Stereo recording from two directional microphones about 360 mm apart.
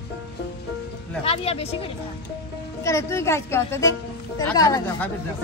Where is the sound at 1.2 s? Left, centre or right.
Centre.